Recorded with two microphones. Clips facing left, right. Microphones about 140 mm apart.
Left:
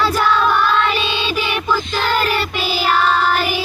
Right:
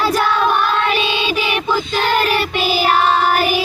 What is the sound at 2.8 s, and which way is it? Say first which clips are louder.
Child singing: right 1 dB; 45° right (ahead or behind).